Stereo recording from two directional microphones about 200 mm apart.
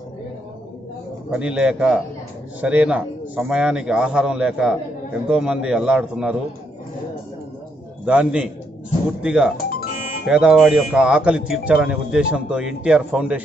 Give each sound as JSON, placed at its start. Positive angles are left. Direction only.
{"t": 1.3, "sound": "speech", "side_deg": -5}
{"t": 8.0, "sound": "speech", "side_deg": -5}